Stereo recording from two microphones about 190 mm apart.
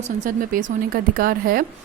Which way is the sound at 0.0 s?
45° right (ahead or behind).